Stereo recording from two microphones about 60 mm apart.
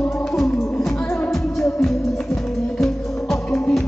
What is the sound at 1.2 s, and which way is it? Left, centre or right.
Music, centre.